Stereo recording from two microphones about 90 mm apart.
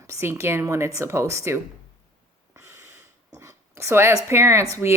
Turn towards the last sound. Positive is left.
turn(degrees=-30)  # may be behind; listen again after turning